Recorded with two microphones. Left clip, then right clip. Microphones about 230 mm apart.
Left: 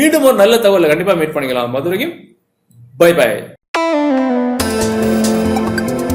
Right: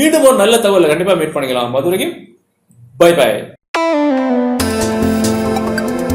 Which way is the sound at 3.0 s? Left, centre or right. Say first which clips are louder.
Right 1 dB; left.